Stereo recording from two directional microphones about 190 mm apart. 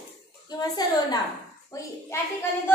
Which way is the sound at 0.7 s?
20° left (ahead or behind).